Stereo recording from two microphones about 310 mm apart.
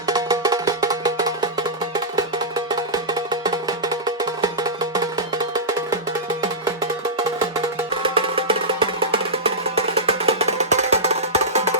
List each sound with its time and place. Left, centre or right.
0.1 s music: centre
2.6 s music: centre
8.0 s music: centre